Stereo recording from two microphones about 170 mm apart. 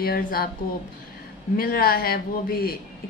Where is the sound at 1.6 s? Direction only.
60° left (ahead or behind).